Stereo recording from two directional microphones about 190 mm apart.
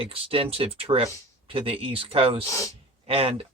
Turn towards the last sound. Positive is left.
turn(degrees=-30)  # may be behind; listen again after turning